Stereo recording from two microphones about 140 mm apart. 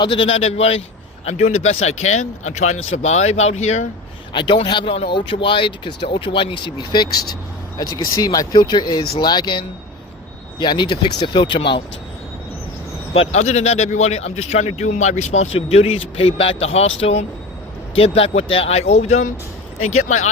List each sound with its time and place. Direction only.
0.0 s speech: 35° left (ahead or behind)
0.3 s speech: 50° left (ahead or behind)
4.3 s speech: 35° left (ahead or behind)
13.1 s speech: 55° left (ahead or behind)